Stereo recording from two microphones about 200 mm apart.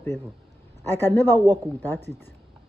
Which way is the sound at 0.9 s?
10° left (ahead or behind).